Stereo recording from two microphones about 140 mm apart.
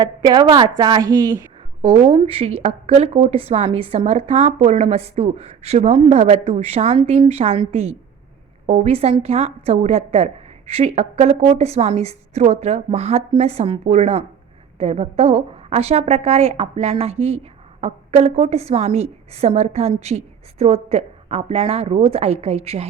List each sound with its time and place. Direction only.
0.0 s a woman's voice: 30° right (ahead or behind)
1.8 s speech: 40° right (ahead or behind)